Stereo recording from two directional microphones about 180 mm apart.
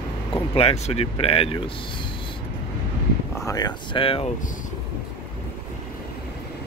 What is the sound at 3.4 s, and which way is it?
Speech, 20° left (ahead or behind).